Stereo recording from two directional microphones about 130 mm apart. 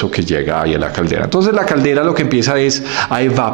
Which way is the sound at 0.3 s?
20° right (ahead or behind).